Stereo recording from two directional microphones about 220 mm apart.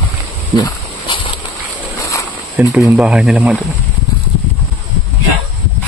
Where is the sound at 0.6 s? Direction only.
20° left (ahead or behind).